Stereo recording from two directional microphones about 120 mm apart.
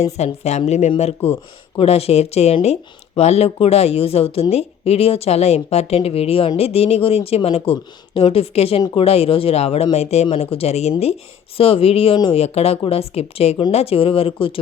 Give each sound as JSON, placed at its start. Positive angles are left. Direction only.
{"t": 0.0, "sound": "speech", "side_deg": 65}